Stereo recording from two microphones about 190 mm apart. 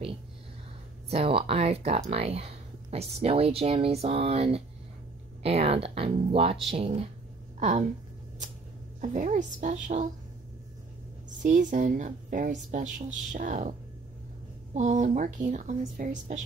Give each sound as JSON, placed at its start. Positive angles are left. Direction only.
{"t": 1.1, "sound": "speech", "side_deg": -30}
{"t": 9.0, "sound": "speech", "side_deg": -40}
{"t": 11.4, "sound": "speech", "side_deg": -40}